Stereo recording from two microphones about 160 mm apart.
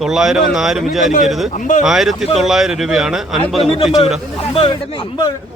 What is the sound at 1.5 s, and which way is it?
Speech, 55° left (ahead or behind).